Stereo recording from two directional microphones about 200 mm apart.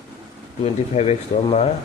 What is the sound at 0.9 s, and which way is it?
Speech, 35° left (ahead or behind).